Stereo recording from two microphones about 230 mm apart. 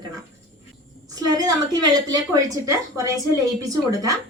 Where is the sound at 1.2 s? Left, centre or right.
Centre.